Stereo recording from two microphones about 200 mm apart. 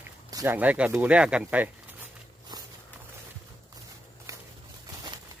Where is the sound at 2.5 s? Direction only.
20° right (ahead or behind).